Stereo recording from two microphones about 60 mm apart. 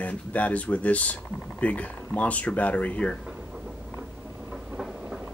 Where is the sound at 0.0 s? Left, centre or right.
Left.